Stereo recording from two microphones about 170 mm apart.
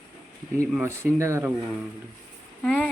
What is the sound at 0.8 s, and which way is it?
Speech, 15° right (ahead or behind).